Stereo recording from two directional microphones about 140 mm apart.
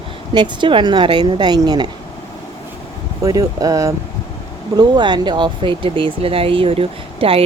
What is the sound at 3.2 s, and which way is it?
Speech, 25° right (ahead or behind).